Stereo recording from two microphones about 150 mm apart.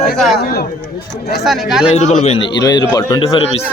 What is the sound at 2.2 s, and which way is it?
A man's voice, 40° left (ahead or behind).